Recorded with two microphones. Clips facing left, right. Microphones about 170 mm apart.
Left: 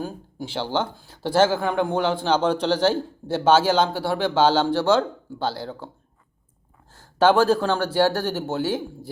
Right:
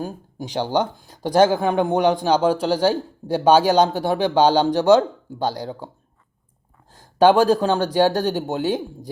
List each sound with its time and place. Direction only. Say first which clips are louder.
0.0 s speech: right 1 dB; 15° right (ahead or behind)
6.9 s speech: right 3 dB; 15° right (ahead or behind)